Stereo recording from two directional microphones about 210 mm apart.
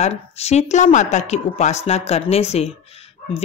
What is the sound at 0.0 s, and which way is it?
Speech, 30° left (ahead or behind).